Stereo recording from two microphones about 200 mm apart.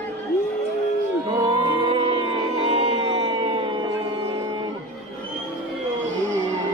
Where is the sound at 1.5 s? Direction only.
25° right (ahead or behind).